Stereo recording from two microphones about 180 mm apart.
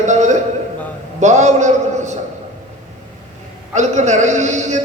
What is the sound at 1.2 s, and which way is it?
Speech, 40° right (ahead or behind).